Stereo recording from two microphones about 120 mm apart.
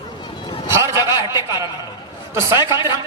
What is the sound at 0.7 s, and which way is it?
Speech, 25° right (ahead or behind).